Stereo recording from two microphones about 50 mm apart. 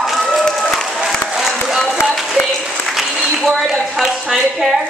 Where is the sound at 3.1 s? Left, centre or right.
Centre.